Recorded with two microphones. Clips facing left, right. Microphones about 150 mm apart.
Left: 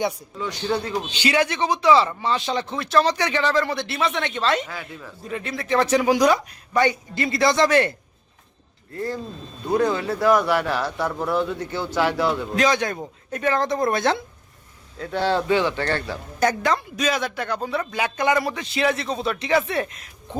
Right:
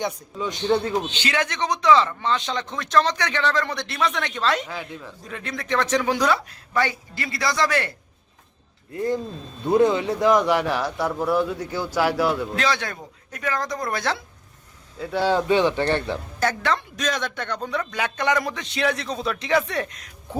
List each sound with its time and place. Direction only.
1.1 s speech: 10° left (ahead or behind)
8.9 s speech: 20° right (ahead or behind)
12.5 s speech: 20° left (ahead or behind)
14.9 s speech: 5° right (ahead or behind)
16.4 s speech: 15° left (ahead or behind)